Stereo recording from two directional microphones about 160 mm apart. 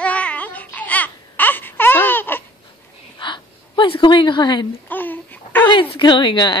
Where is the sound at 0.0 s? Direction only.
10° left (ahead or behind).